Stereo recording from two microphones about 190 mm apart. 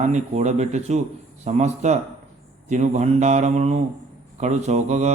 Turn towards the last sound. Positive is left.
turn(degrees=-35)  # may be behind; listen again after turning